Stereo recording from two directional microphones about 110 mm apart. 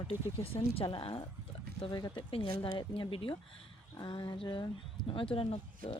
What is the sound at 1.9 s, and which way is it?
Speech, 40° left (ahead or behind).